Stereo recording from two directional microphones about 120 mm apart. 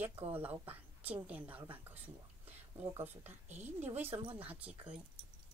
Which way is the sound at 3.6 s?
65° right (ahead or behind).